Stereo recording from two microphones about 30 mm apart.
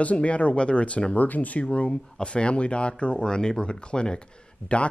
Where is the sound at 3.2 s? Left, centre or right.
Left.